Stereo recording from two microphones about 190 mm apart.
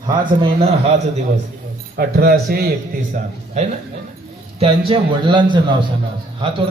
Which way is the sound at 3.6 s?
35° right (ahead or behind).